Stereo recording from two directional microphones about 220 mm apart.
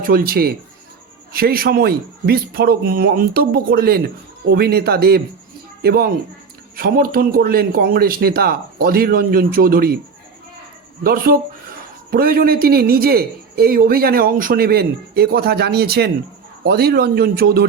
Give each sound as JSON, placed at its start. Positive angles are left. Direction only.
{"t": 0.0, "sound": "a man's voice", "side_deg": -40}
{"t": 11.0, "sound": "a man's voice", "side_deg": -40}